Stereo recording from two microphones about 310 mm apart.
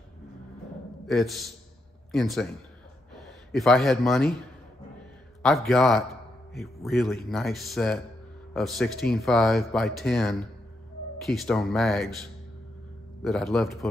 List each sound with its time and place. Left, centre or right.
1.0 s speech: centre
3.5 s speech: centre
5.7 s speech: centre
13.2 s speech: centre